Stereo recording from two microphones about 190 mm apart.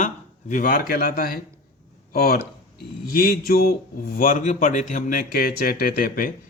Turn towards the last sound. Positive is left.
turn(degrees=50)  # may be behind; listen again after turning